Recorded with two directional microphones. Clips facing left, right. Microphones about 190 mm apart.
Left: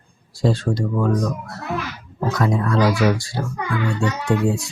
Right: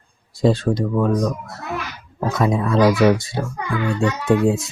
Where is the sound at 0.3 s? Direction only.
20° right (ahead or behind).